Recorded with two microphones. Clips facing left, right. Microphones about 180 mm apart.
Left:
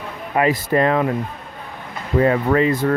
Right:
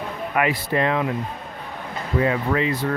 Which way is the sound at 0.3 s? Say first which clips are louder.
Left 5 dB; 40° left (ahead or behind).